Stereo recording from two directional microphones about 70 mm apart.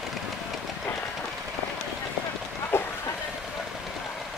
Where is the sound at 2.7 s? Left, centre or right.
Left.